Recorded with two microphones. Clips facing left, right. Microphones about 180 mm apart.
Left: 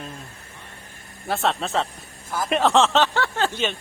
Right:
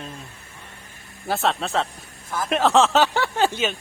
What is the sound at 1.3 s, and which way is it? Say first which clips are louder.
Speech: even; centre (ahead or behind).